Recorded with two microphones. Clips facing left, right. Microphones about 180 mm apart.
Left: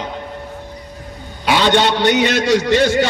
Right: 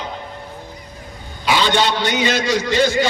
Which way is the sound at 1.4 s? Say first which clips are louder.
Left 3 dB; 60° left (ahead or behind).